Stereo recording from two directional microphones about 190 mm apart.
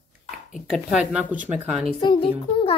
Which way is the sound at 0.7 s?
Centre (ahead or behind).